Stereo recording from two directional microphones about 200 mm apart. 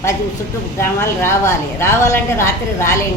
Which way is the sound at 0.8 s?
10° left (ahead or behind).